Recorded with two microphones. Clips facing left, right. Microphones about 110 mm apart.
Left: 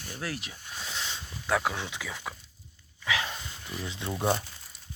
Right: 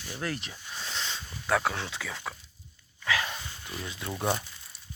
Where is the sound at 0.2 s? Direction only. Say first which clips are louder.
Right 2 dB; 5° left (ahead or behind).